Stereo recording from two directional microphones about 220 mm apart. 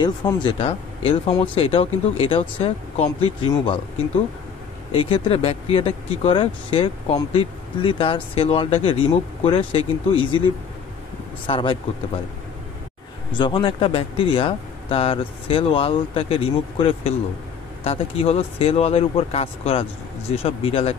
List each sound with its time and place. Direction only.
0.0 s speech: 20° left (ahead or behind)
4.9 s speech: 25° left (ahead or behind)
11.4 s speech: 25° left (ahead or behind)
13.4 s speech: 20° left (ahead or behind)